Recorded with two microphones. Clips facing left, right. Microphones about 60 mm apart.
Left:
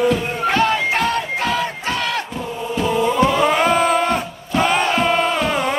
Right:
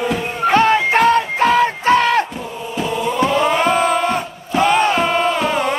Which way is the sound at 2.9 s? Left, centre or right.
Centre.